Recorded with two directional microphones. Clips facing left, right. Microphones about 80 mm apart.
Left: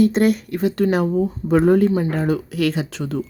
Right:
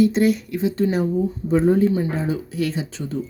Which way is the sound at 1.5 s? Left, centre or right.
Left.